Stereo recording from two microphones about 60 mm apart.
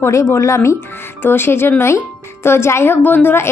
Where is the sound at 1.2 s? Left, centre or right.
Left.